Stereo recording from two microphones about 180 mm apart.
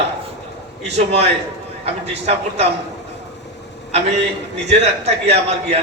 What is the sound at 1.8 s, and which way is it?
Speech, 35° right (ahead or behind).